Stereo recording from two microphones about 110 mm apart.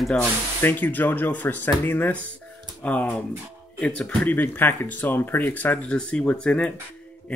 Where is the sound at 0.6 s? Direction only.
15° left (ahead or behind).